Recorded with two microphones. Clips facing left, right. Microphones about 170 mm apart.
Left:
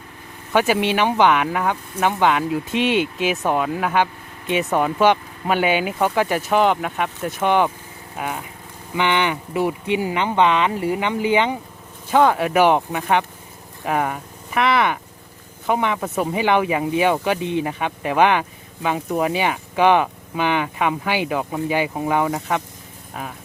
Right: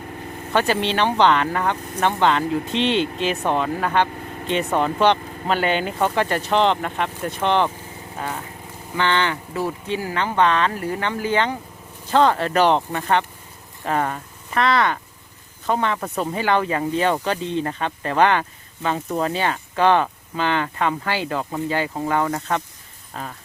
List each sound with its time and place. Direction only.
0.5 s speech: 10° left (ahead or behind)